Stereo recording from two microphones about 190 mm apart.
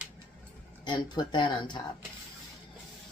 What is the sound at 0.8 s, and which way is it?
Speech, 25° left (ahead or behind).